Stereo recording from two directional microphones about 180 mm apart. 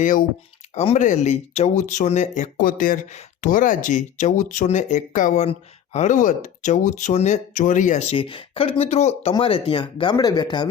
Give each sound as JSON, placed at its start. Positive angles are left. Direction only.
{"t": 0.0, "sound": "speech", "side_deg": 45}